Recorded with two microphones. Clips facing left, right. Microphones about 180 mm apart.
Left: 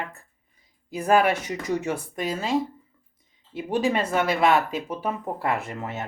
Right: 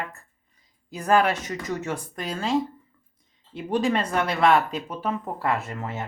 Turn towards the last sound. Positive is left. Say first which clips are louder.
# even
turn(degrees=20)  # may be behind; listen again after turning